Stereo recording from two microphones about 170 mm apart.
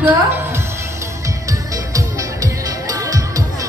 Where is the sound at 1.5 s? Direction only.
20° right (ahead or behind).